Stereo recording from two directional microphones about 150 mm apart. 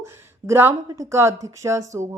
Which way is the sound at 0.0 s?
15° right (ahead or behind).